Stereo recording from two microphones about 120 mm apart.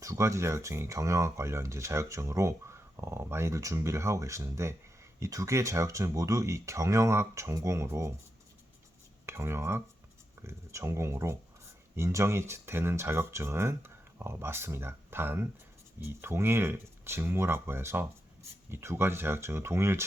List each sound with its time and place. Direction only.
0.0 s speech: 25° right (ahead or behind)
9.2 s speech: 20° right (ahead or behind)